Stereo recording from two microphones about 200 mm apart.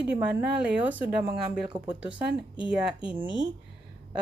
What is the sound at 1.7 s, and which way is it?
Speech, 20° right (ahead or behind).